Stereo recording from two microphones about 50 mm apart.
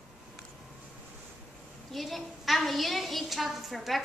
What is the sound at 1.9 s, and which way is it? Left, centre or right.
A woman's voice, centre.